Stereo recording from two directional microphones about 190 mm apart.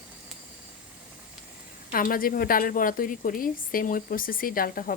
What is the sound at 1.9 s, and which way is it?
A woman's voice, 50° left (ahead or behind).